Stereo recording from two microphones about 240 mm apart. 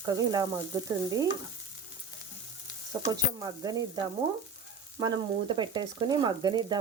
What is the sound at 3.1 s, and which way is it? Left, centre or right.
Stir, centre.